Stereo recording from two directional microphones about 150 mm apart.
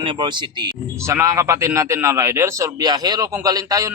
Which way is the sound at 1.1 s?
20° right (ahead or behind).